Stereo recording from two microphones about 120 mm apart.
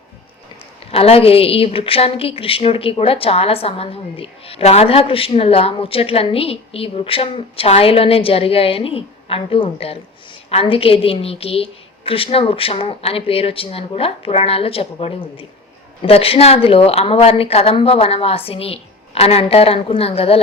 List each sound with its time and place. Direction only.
0.9 s a woman's voice: 55° left (ahead or behind)